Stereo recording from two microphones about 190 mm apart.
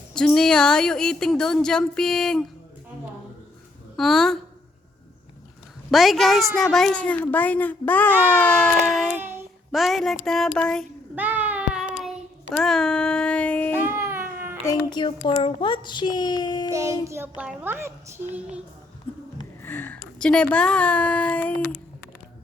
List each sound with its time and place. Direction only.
0.1 s speech: 5° left (ahead or behind)
3.9 s speech: centre (ahead or behind)
5.9 s a woman's voice: centre (ahead or behind)
11.1 s child singing: 10° right (ahead or behind)
12.5 s speech: centre (ahead or behind)
13.7 s baby cry: 15° right (ahead or behind)
14.6 s speech: 20° left (ahead or behind)
17.0 s a child's voice: 15° right (ahead or behind)
19.1 s a sound: 10° left (ahead or behind)
19.6 s a woman's voice: 10° left (ahead or behind)